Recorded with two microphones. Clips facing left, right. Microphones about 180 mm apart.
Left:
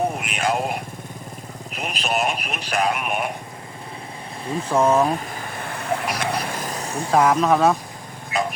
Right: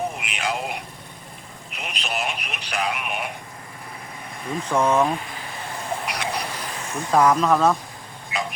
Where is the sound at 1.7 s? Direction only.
45° left (ahead or behind).